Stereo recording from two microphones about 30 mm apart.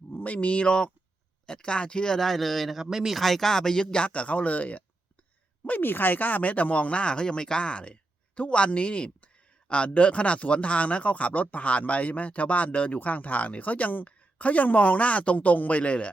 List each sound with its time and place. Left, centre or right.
0.3 s speech: left
0.6 s speech: left
2.1 s speech: centre
2.8 s speech: right
3.2 s speech: centre; by 4.8 s left
5.6 s speech: left
7.0 s speech: left
13.0 s speech: left